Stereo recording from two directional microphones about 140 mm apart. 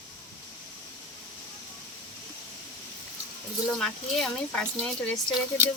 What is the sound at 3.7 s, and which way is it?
Speech, 5° left (ahead or behind).